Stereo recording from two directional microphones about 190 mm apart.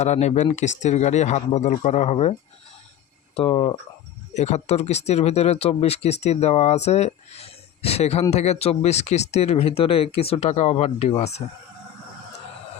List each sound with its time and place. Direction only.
0.0 s speech: 35° left (ahead or behind)
3.3 s speech: 30° left (ahead or behind)
4.4 s speech: 35° left (ahead or behind)